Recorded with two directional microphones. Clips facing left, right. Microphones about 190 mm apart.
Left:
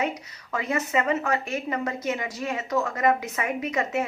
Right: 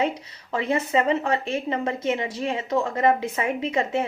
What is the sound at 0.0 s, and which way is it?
Speech, 30° right (ahead or behind).